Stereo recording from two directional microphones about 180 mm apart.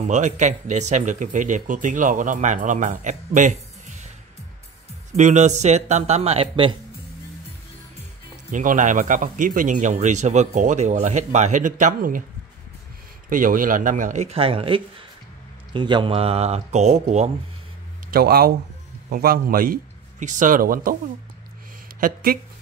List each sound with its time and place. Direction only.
0.0 s a man's voice: 40° right (ahead or behind)
5.1 s a man's voice: 40° right (ahead or behind)
8.5 s a man's voice: 45° right (ahead or behind)
13.3 s a man's voice: 50° right (ahead or behind)
18.1 s a man's voice: 55° right (ahead or behind)
22.0 s speech: 55° right (ahead or behind)